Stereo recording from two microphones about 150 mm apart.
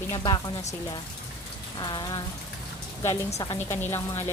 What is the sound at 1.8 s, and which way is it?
Speech, 30° left (ahead or behind).